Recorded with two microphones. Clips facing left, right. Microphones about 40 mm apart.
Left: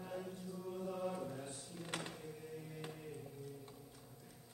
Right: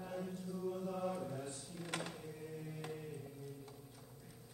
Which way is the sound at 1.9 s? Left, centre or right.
Centre.